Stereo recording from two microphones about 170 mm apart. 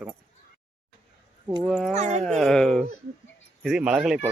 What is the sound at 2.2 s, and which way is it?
Speech, centre (ahead or behind).